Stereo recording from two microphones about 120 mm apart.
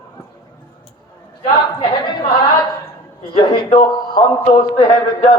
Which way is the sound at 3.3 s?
50° left (ahead or behind).